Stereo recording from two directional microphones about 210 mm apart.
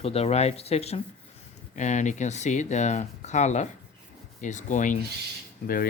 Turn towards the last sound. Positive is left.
turn(degrees=45)  # may be behind; listen again after turning